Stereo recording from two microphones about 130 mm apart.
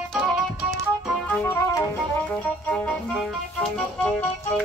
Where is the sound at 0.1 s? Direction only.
5° left (ahead or behind).